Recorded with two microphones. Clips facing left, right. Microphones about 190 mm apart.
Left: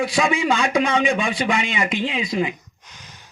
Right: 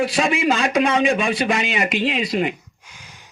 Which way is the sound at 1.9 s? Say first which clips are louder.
Right 2 dB; 70° right (ahead or behind).